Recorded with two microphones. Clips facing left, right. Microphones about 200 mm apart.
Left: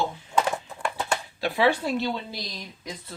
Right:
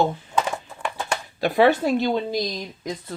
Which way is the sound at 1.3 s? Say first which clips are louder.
Right 6 dB; 45° right (ahead or behind).